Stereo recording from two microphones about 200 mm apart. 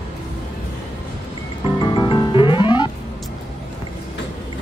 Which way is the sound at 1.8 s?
25° left (ahead or behind).